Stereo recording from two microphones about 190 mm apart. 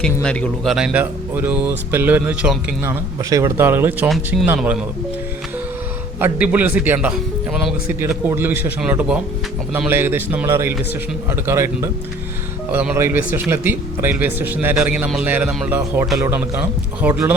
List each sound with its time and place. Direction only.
0.0 s speech: 5° left (ahead or behind); by 4.1 s 10° right (ahead or behind)
4.1 s speech: centre (ahead or behind)
6.1 s speech: 10° right (ahead or behind)